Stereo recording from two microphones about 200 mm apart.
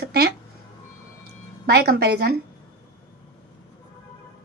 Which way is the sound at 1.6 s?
50° right (ahead or behind).